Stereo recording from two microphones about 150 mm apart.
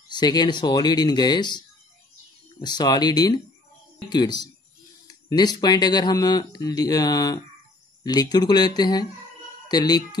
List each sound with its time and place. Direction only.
0.1 s speech: 30° left (ahead or behind)
2.6 s speech: 30° left (ahead or behind)